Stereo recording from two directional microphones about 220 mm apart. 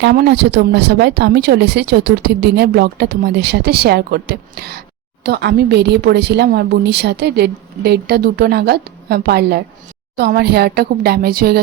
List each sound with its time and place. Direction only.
0.0 s speech: 45° right (ahead or behind)